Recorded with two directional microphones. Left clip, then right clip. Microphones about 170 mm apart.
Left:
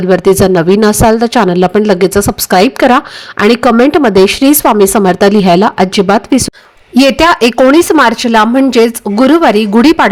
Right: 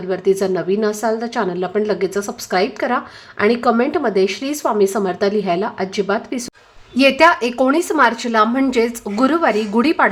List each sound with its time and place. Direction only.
0.1 s speech: 50° left (ahead or behind)